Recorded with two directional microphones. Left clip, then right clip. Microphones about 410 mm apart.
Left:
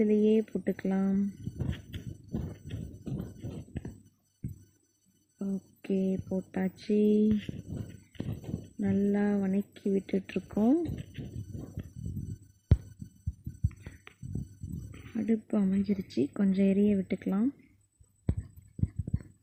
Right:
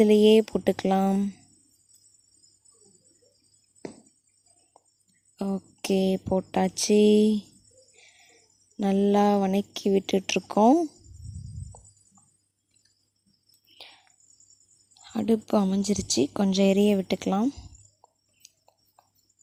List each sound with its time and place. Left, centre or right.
0.0 s speech: centre
5.4 s speech: centre
8.8 s speech: centre
15.1 s speech: centre